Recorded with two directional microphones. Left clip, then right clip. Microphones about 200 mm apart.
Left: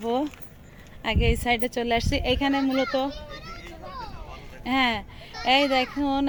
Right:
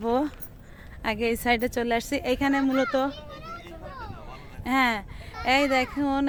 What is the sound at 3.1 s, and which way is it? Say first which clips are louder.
Children playing: even; 50° right (ahead or behind).